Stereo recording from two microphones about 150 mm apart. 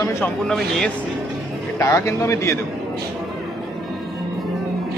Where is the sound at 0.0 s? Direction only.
20° left (ahead or behind).